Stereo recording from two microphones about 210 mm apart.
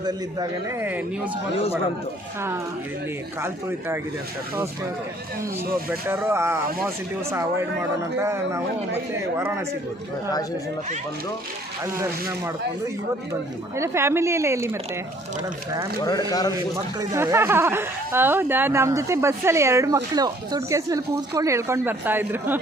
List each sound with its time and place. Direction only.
0.0 s speech: 15° right (ahead or behind)
3.4 s speech: 10° right (ahead or behind)
5.9 s speech: 10° right (ahead or behind)
13.7 s speech: 15° right (ahead or behind)
16.0 s speech: 20° left (ahead or behind)
17.0 s speech: 15° right (ahead or behind)